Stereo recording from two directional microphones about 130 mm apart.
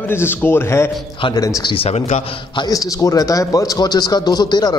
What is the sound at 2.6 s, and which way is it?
A man's voice, 25° left (ahead or behind).